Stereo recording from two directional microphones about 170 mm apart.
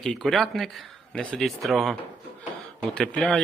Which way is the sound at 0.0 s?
Centre (ahead or behind).